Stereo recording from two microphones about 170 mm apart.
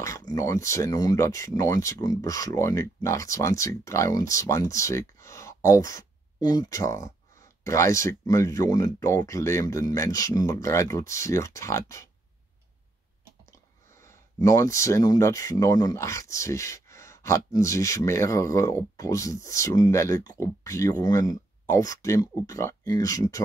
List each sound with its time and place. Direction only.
0.0 s speech: 20° left (ahead or behind)
14.0 s speech: 20° left (ahead or behind)